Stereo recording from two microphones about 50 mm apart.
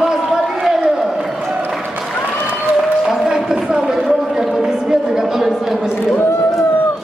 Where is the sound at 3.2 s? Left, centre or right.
Centre.